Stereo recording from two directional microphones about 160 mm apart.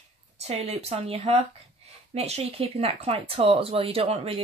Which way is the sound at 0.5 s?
40° right (ahead or behind).